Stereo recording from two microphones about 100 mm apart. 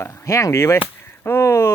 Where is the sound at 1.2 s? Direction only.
25° left (ahead or behind).